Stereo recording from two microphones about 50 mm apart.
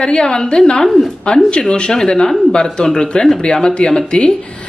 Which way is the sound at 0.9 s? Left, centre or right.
Centre.